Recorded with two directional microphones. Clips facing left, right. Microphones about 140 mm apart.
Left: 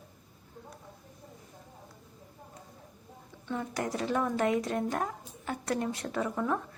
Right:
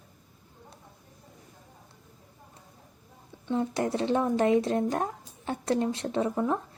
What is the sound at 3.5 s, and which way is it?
Speech, 25° right (ahead or behind).